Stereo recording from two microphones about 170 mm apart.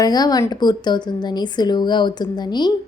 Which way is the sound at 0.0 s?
25° left (ahead or behind).